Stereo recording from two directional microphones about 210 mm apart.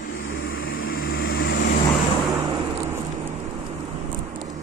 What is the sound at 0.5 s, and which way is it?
Vehicle, 70° left (ahead or behind).